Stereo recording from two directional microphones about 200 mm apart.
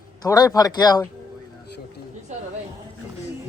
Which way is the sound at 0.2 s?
20° left (ahead or behind).